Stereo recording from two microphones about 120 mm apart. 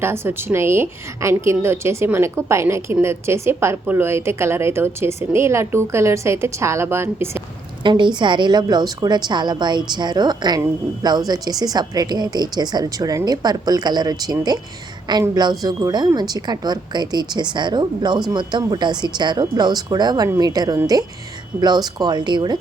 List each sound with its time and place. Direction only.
0.0 s a woman's voice: 20° right (ahead or behind)
7.9 s a woman's voice: 40° right (ahead or behind)
15.4 s a woman's voice: 35° right (ahead or behind)